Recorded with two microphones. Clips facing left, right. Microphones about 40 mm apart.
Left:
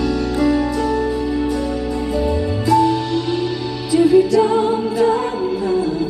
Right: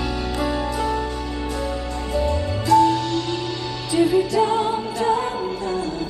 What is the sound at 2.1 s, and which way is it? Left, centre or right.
Music, centre.